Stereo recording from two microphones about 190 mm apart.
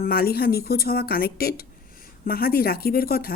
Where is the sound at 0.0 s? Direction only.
55° left (ahead or behind).